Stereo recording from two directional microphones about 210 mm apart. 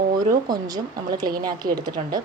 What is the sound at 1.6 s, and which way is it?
Speech, 45° right (ahead or behind).